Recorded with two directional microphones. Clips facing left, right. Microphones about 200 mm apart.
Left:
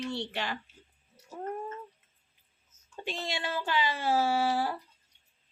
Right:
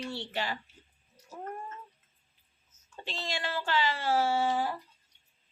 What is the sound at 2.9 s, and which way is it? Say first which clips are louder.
Speech: left 2 dB; 15° left (ahead or behind).